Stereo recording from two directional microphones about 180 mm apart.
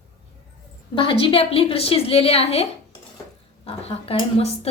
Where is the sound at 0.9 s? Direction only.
30° left (ahead or behind).